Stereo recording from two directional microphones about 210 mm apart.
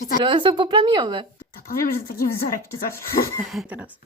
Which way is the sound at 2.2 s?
45° left (ahead or behind).